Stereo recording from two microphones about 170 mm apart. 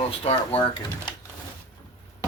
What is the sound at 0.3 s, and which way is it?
Speech, 30° left (ahead or behind).